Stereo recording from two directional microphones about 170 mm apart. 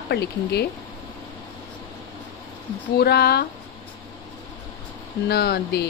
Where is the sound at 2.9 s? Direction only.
70° left (ahead or behind).